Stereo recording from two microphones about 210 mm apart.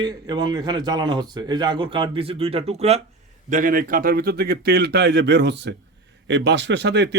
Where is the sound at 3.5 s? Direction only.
40° right (ahead or behind).